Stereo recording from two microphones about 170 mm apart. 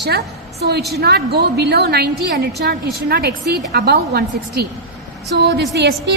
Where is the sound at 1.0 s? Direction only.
70° right (ahead or behind).